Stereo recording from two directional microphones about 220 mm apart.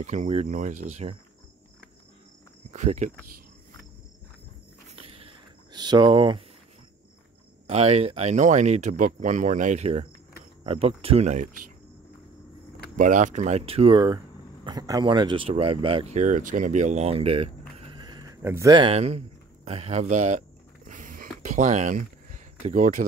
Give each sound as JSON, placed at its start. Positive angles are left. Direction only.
{"t": 0.0, "sound": "speech", "side_deg": -30}
{"t": 2.7, "sound": "speech", "side_deg": -30}
{"t": 4.8, "sound": "a sound", "side_deg": -25}
{"t": 7.6, "sound": "speech", "side_deg": -30}
{"t": 12.9, "sound": "speech", "side_deg": -35}